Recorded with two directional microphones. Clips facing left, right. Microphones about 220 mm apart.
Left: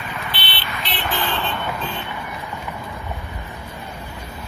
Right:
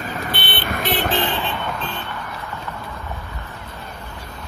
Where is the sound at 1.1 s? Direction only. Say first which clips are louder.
Right 3 dB; 25° right (ahead or behind).